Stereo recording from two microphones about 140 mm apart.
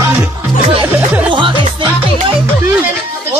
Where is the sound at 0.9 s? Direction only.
15° right (ahead or behind).